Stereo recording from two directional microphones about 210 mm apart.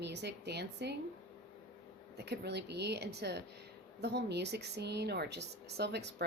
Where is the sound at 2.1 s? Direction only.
50° right (ahead or behind).